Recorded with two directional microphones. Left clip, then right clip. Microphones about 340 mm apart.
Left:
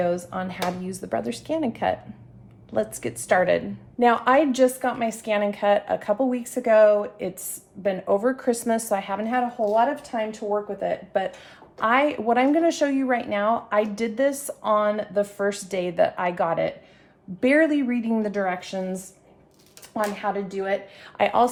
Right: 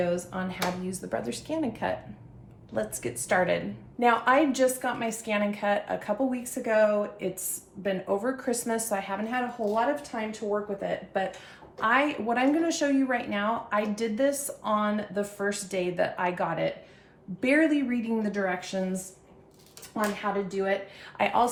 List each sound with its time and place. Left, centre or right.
0.0 s a woman's voice: left
19.9 s a woman's voice: left